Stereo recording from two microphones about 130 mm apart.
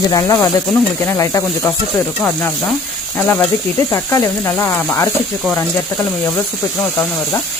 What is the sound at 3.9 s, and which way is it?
Frying, 20° left (ahead or behind).